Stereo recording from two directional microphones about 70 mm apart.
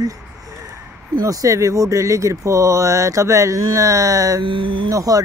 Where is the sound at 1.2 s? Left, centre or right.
Right.